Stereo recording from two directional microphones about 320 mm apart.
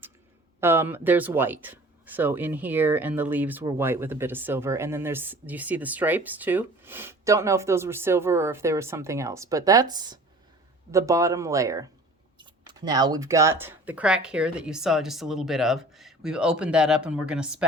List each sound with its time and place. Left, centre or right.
0.6 s speech: centre